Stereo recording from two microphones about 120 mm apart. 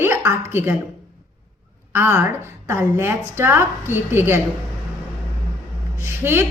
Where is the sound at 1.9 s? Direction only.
20° right (ahead or behind).